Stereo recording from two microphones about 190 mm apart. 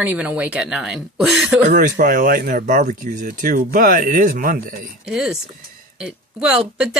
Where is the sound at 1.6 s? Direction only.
40° right (ahead or behind).